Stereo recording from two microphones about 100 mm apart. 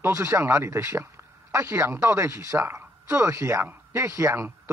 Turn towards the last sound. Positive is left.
turn(degrees=-25)  # may be behind; listen again after turning